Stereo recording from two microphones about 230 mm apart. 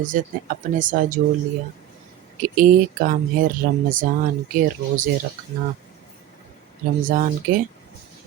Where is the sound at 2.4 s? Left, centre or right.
Right.